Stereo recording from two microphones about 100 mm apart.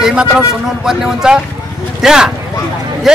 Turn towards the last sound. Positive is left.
turn(degrees=-5)  # may be behind; listen again after turning